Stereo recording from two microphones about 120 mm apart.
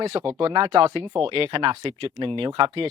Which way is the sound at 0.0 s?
55° right (ahead or behind).